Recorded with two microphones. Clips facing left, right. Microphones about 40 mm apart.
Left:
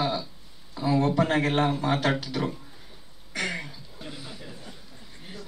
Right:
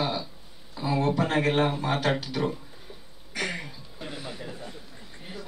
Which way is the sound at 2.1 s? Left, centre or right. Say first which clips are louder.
Right 1 dB; centre.